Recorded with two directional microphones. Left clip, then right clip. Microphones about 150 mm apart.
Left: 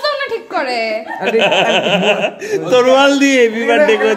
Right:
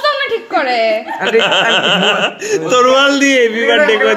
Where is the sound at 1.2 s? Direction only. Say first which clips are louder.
Even; 20° left (ahead or behind); by 4.1 s 40° left (ahead or behind).